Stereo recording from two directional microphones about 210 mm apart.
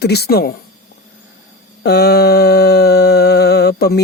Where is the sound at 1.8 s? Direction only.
50° left (ahead or behind).